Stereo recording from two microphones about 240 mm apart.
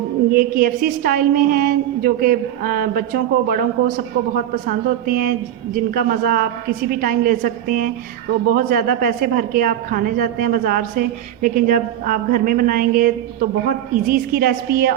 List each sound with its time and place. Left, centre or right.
0.3 s a woman's voice: right